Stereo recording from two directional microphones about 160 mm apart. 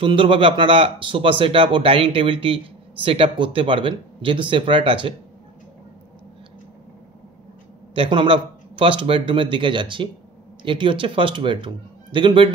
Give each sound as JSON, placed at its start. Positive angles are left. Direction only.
{"t": 0.0, "sound": "a man's voice", "side_deg": -35}
{"t": 7.9, "sound": "a man's voice", "side_deg": -30}